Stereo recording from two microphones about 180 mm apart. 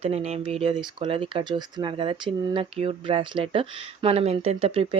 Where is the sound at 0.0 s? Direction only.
35° right (ahead or behind).